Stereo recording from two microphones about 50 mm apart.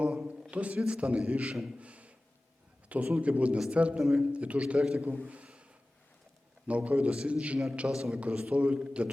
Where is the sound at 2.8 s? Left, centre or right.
Right.